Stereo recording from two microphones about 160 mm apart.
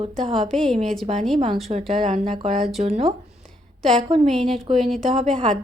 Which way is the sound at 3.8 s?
5° left (ahead or behind).